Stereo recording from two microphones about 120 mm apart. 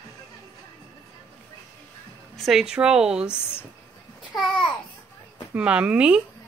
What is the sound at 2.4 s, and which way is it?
Speech, 5° right (ahead or behind).